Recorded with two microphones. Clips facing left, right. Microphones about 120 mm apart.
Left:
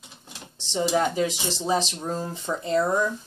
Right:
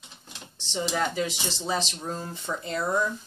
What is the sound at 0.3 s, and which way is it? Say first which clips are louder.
Dishes: left 4 dB; 10° left (ahead or behind).